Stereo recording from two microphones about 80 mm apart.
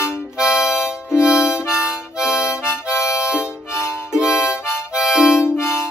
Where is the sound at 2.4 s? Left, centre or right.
Left.